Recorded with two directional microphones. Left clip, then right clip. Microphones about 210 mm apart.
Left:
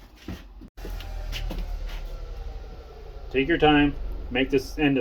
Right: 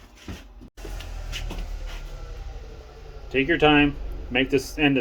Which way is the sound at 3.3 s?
35° right (ahead or behind).